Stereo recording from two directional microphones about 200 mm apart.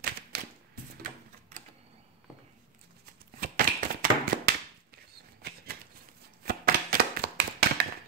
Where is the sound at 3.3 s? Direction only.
45° right (ahead or behind).